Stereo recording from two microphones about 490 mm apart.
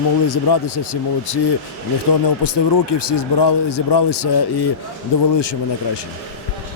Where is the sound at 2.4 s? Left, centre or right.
Left.